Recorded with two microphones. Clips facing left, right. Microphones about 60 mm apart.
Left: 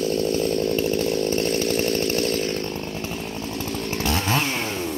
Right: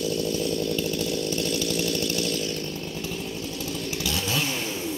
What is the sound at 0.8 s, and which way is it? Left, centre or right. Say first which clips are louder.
Chainsaw: left 5 dB; left.